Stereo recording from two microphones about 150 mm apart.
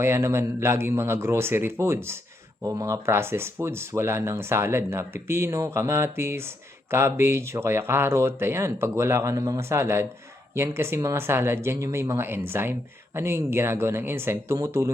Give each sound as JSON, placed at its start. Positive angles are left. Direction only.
{"t": 0.0, "sound": "speech", "side_deg": -15}